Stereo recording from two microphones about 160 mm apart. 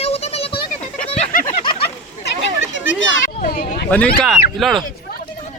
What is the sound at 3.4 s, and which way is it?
Speech, 65° left (ahead or behind).